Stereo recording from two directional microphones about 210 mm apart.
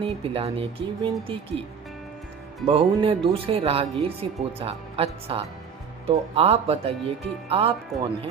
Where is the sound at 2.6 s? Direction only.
25° right (ahead or behind).